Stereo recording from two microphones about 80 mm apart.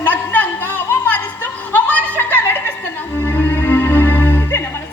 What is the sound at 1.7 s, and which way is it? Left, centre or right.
Chuckle, left.